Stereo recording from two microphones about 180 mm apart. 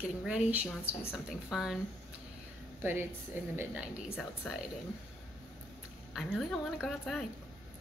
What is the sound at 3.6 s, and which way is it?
A woman's voice, 5° right (ahead or behind).